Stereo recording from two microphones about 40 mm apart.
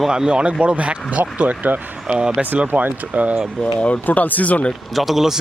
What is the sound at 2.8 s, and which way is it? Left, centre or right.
Speech, right.